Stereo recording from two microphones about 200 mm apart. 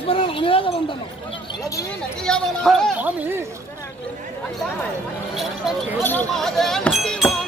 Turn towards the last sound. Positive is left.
turn(degrees=0)  # may be behind; listen again after turning